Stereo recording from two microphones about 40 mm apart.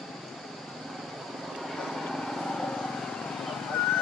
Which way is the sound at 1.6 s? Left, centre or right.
Centre.